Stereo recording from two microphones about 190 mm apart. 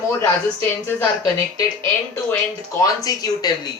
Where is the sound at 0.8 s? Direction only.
10° left (ahead or behind).